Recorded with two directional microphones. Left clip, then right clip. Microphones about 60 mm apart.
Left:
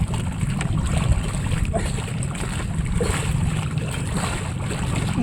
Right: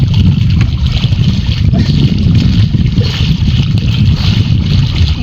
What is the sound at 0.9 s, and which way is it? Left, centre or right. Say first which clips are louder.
Boat: right 10 dB; centre.